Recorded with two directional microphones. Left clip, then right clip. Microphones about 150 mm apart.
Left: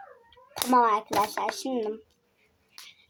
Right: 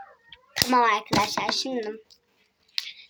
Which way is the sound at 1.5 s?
5° left (ahead or behind).